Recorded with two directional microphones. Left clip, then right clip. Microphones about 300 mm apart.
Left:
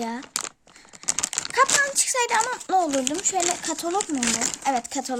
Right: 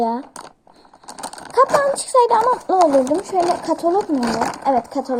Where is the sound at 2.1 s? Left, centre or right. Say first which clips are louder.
Right 9 dB; left.